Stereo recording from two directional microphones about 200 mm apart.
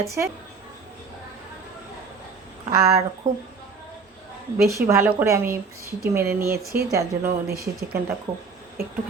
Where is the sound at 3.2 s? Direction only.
40° right (ahead or behind).